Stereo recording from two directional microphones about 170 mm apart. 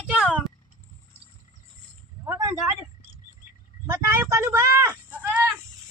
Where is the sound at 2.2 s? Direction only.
20° right (ahead or behind).